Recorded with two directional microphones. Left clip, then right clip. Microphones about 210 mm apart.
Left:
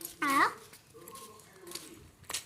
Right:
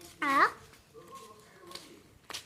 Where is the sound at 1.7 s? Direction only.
25° left (ahead or behind).